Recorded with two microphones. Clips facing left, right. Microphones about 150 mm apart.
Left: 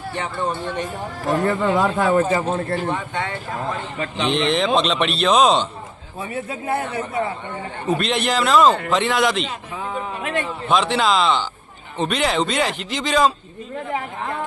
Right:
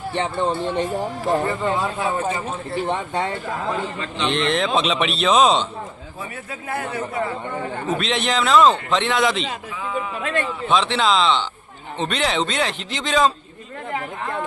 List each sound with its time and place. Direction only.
0.1 s speech: 25° right (ahead or behind)
1.6 s a man's voice: 75° left (ahead or behind)
2.9 s speech: 35° right (ahead or behind)
4.3 s speech: centre (ahead or behind)
6.3 s a man's voice: 25° left (ahead or behind)
7.9 s speech: centre (ahead or behind)
10.2 s a sound: 15° left (ahead or behind)
10.7 s speech: 5° left (ahead or behind)